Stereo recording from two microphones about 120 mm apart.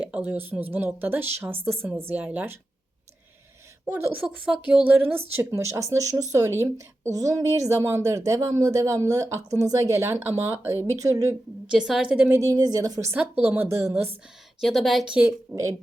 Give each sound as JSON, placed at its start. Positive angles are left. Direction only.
{"t": 0.0, "sound": "speech", "side_deg": -15}
{"t": 3.8, "sound": "speech", "side_deg": -20}
{"t": 11.6, "sound": "speech", "side_deg": -5}
{"t": 12.3, "sound": "a woman's voice", "side_deg": -30}
{"t": 13.1, "sound": "speech", "side_deg": -15}
{"t": 14.6, "sound": "a woman's voice", "side_deg": 0}
{"t": 15.5, "sound": "speech", "side_deg": -15}